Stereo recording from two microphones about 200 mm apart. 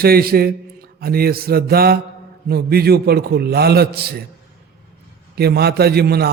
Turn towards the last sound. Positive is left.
turn(degrees=-50)  # may be behind; listen again after turning